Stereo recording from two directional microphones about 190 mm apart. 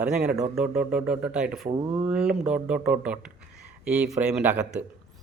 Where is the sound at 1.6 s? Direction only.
30° right (ahead or behind).